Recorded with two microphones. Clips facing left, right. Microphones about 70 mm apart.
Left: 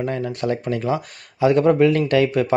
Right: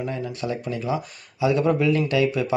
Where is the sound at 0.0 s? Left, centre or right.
Left.